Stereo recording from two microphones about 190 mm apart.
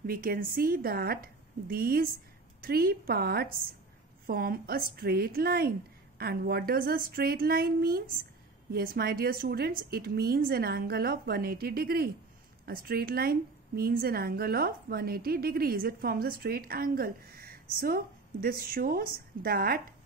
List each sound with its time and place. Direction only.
0.0 s a woman's voice: 50° right (ahead or behind)